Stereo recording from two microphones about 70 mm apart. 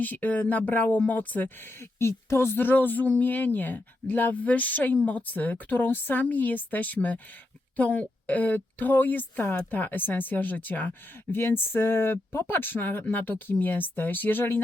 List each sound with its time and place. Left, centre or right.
0.0 s speech: left
1.8 s speech: left